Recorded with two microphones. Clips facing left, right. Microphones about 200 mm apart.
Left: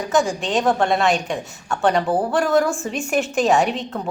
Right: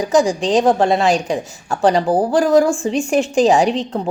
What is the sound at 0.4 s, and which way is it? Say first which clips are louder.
A woman's voice: right 5 dB; 30° right (ahead or behind).